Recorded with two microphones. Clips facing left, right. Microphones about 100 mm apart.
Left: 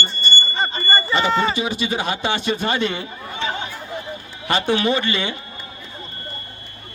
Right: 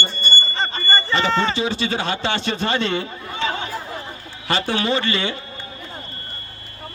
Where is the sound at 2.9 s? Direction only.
20° left (ahead or behind).